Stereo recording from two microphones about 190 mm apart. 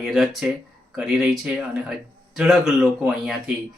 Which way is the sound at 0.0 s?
Centre (ahead or behind).